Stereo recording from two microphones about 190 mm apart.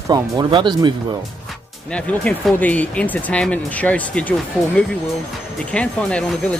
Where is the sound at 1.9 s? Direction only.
5° left (ahead or behind).